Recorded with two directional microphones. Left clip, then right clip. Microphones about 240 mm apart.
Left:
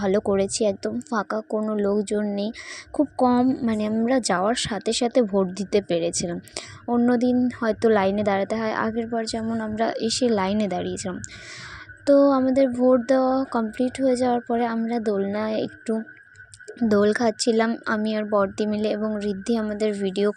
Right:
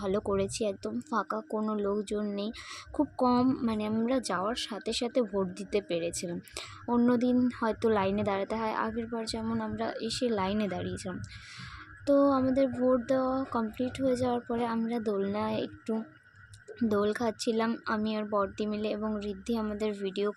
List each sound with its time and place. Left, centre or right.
0.0 s a woman's voice: left